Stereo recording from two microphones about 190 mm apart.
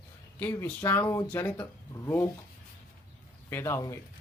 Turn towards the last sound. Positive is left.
turn(degrees=15)  # may be behind; listen again after turning